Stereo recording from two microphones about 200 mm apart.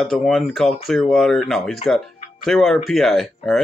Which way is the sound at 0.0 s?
Centre (ahead or behind).